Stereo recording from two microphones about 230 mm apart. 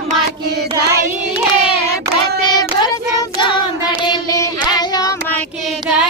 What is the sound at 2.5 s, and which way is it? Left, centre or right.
Child singing, centre.